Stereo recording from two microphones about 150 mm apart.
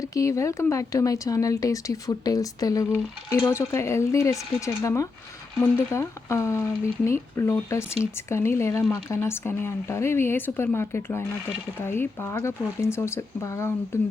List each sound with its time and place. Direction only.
0.0 s speech: 20° left (ahead or behind)